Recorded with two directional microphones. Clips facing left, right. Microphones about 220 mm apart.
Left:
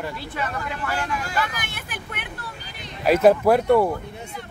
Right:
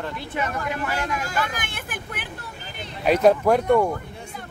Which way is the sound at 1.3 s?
50° right (ahead or behind).